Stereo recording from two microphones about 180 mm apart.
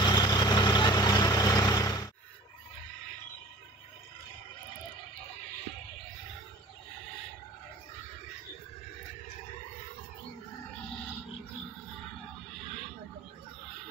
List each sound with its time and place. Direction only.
0.0 s vehicle: 25° left (ahead or behind)